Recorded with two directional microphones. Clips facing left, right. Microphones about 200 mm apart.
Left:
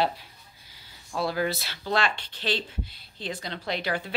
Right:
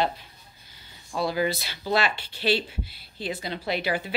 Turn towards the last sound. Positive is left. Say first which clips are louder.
# right 2 dB
turn(degrees=-5)  # may be behind; listen again after turning